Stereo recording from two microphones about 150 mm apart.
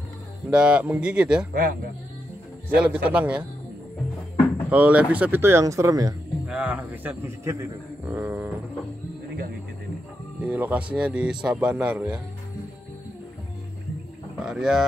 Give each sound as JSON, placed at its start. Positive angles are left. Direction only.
{"t": 0.5, "sound": "speech", "side_deg": -5}
{"t": 1.5, "sound": "speech", "side_deg": -70}
{"t": 2.7, "sound": "speech", "side_deg": -10}
{"t": 4.6, "sound": "speech", "side_deg": -10}
{"t": 6.4, "sound": "speech", "side_deg": -10}
{"t": 10.4, "sound": "speech", "side_deg": -10}
{"t": 14.4, "sound": "speech", "side_deg": -5}